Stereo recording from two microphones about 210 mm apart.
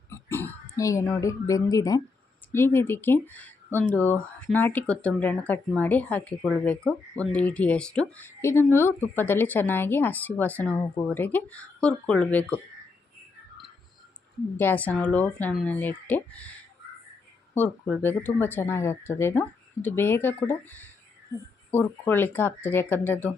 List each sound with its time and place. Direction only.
0.1 s a sound: 10° left (ahead or behind)
0.8 s speech: 15° left (ahead or behind)
14.6 s speech: 10° left (ahead or behind)
17.5 s speech: 10° left (ahead or behind)